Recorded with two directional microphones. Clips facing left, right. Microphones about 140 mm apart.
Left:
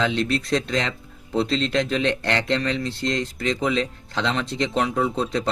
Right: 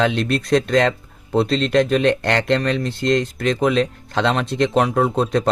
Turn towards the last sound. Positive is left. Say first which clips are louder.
# right 5 dB
turn(degrees=-55)  # may be behind; listen again after turning